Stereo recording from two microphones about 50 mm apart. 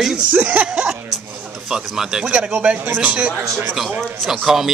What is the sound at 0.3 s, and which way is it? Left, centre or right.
Speech, right.